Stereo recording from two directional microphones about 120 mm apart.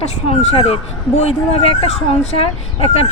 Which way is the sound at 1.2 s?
60° left (ahead or behind).